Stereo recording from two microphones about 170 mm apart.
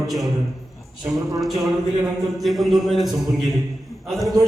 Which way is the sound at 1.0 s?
Centre (ahead or behind).